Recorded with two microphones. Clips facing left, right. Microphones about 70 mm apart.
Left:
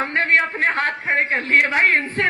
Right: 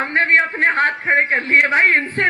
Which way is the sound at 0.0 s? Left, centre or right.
Right.